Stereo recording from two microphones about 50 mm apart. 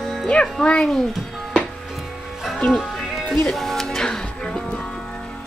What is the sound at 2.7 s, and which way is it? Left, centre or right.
Music, centre.